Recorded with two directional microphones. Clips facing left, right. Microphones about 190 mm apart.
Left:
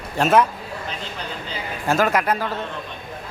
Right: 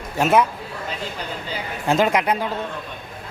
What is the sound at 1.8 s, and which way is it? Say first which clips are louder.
Speech: right 1 dB; 20° right (ahead or behind).